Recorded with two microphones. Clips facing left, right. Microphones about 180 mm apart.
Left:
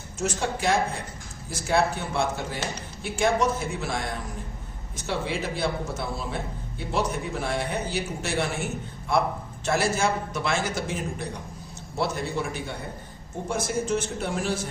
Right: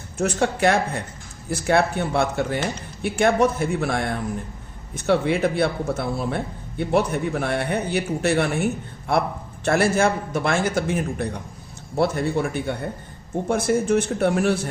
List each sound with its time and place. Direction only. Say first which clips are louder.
0.2 s a man's voice: right 7 dB; 60° right (ahead or behind)
9.6 s a man's voice: right 5 dB; 55° right (ahead or behind)